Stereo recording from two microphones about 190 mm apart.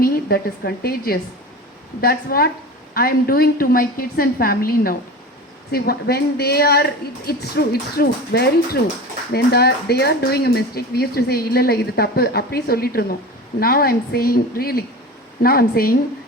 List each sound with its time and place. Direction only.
0.0 s a woman's voice: 55° left (ahead or behind)